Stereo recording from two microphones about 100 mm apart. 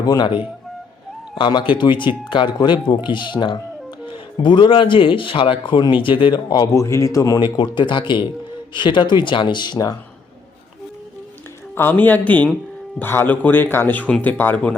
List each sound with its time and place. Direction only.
0.0 s speech: 40° left (ahead or behind)
1.4 s speech: 50° left (ahead or behind)
6.7 s a man's voice: 30° left (ahead or behind)
7.5 s speech: 50° left (ahead or behind)
11.7 s speech: 20° left (ahead or behind)